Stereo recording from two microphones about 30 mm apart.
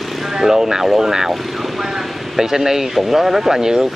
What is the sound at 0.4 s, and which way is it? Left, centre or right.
Speech, centre.